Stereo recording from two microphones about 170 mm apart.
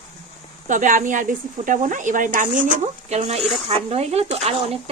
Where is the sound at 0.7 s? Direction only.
50° right (ahead or behind).